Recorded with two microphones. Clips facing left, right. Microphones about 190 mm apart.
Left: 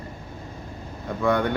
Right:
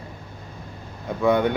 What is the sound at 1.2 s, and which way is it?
Speech, 20° right (ahead or behind).